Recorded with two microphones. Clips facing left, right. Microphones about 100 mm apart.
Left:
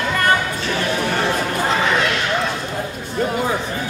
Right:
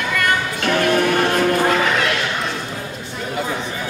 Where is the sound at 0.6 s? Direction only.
60° right (ahead or behind).